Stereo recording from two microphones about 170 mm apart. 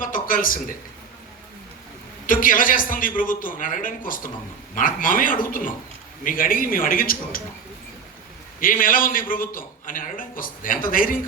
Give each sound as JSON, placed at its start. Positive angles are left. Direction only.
{"t": 0.0, "sound": "a sound", "side_deg": 55}
{"t": 2.2, "sound": "a man's voice", "side_deg": 55}
{"t": 8.6, "sound": "a man's voice", "side_deg": 55}